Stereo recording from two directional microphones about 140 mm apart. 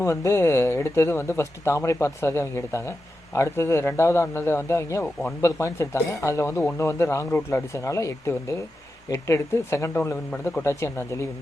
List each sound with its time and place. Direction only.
0.0 s speech: 20° left (ahead or behind)